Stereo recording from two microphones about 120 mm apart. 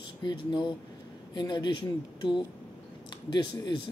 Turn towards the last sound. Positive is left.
turn(degrees=35)  # may be behind; listen again after turning